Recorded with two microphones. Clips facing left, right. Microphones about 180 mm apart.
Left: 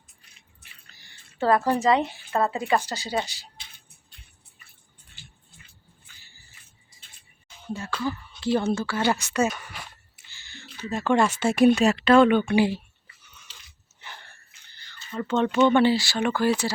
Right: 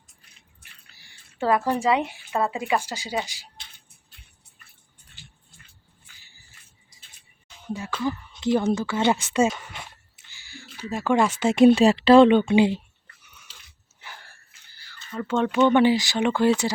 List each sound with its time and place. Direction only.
0.9 s a sound: 10° right (ahead or behind)
1.7 s speech: 10° right (ahead or behind)
7.7 s speech: 15° right (ahead or behind)
13.2 s biting: 10° right (ahead or behind)
14.0 s a sound: 5° right (ahead or behind)
15.3 s speech: 10° right (ahead or behind)